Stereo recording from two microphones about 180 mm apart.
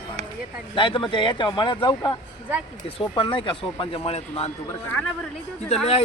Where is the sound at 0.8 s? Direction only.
25° left (ahead or behind).